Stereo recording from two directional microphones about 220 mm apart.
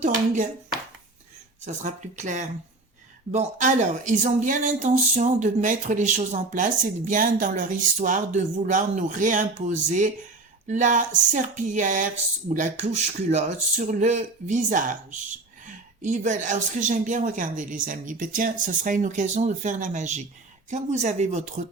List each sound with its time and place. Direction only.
1.6 s speech: 35° right (ahead or behind)